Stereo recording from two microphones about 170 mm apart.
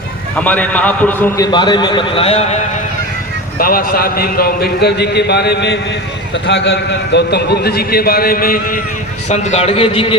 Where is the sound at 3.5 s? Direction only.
60° left (ahead or behind).